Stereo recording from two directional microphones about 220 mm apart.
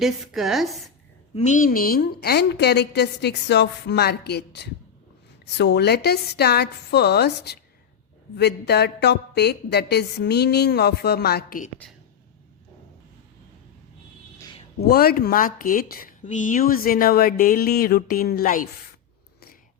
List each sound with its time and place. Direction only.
0.0 s a woman's voice: centre (ahead or behind)
1.4 s a woman's voice: 35° left (ahead or behind)
14.8 s speech: 45° left (ahead or behind)